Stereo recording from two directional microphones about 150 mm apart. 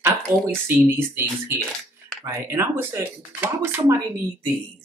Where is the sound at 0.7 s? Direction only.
15° right (ahead or behind).